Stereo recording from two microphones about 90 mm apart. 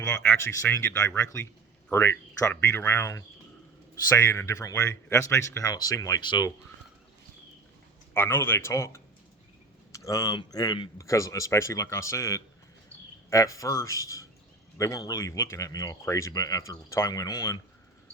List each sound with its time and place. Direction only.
0.0 s speech: 35° left (ahead or behind); by 6.5 s 50° left (ahead or behind)
8.1 s speech: 25° left (ahead or behind); by 10.8 s 50° left (ahead or behind)
10.9 s speech: 35° left (ahead or behind)